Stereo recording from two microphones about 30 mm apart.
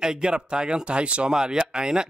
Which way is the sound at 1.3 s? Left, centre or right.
Right.